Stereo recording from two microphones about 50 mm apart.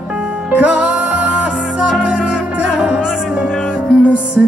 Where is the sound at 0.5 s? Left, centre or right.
Centre.